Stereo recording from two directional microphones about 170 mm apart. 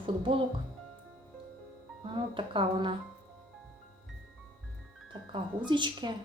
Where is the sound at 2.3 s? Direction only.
30° right (ahead or behind).